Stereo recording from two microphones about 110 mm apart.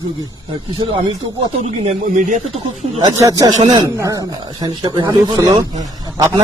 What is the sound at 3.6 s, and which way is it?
Speech, 45° right (ahead or behind).